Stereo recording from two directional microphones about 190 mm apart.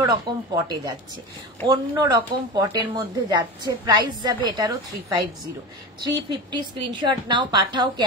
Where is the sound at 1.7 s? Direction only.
20° right (ahead or behind).